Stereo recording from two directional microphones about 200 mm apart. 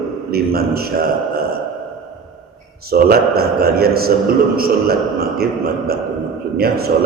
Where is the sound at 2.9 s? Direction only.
50° right (ahead or behind).